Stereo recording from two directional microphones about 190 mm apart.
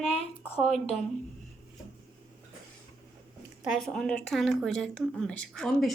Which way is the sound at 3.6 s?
Centre (ahead or behind).